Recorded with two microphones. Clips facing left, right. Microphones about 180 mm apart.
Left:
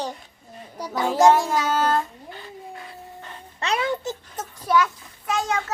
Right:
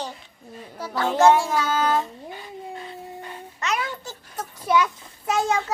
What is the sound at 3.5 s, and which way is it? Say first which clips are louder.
Speech: left 4 dB; 30° left (ahead or behind).